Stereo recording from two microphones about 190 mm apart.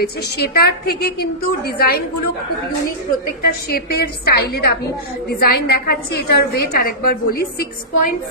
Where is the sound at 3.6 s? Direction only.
55° left (ahead or behind).